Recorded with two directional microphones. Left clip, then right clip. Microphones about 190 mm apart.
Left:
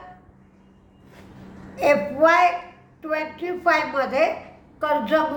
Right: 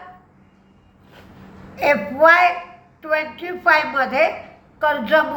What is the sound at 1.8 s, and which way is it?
A woman's voice, 15° left (ahead or behind).